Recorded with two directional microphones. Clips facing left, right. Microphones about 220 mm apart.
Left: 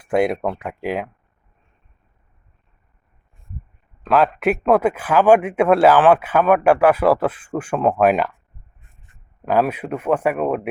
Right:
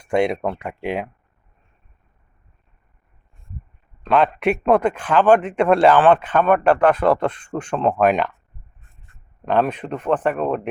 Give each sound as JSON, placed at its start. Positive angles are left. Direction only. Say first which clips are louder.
{"t": 0.0, "sound": "a man's voice", "louder": "left 1 dB", "side_deg": 5}
{"t": 4.0, "sound": "a man's voice", "louder": "left 1 dB", "side_deg": 5}
{"t": 9.5, "sound": "speech", "louder": "left 1 dB", "side_deg": 5}